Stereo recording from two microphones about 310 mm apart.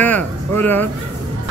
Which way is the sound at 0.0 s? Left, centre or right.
Centre.